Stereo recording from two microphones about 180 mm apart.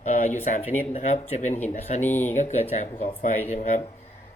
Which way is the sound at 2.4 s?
40° left (ahead or behind).